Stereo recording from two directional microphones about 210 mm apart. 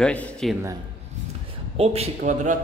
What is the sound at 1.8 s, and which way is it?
Speech, 30° right (ahead or behind).